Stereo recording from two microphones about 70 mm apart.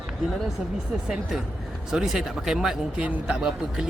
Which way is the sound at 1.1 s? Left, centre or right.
Centre.